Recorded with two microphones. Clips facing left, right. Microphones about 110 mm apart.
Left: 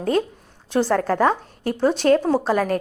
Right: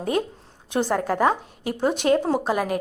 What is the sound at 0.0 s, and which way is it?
A woman's voice, 20° right (ahead or behind).